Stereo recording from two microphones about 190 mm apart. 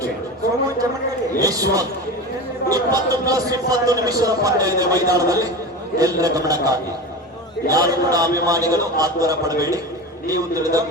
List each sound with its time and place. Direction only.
1.4 s speech: 20° right (ahead or behind)